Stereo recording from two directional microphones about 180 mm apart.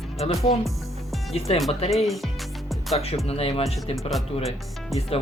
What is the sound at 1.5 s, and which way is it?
Speech, 30° left (ahead or behind).